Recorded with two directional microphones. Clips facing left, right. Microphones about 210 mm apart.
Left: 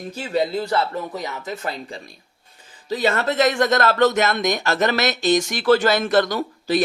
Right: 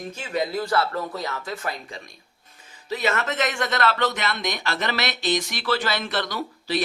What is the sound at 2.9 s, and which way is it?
Speech, 30° left (ahead or behind).